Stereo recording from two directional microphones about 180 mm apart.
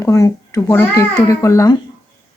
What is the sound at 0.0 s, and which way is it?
A child's voice, 15° left (ahead or behind).